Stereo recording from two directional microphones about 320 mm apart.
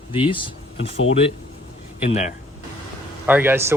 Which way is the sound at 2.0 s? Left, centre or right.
Left.